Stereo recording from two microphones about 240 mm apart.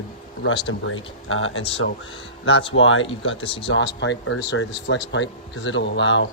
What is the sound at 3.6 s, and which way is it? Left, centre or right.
Speech, left.